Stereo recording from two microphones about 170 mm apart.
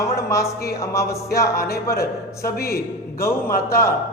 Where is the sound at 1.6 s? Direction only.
65° left (ahead or behind).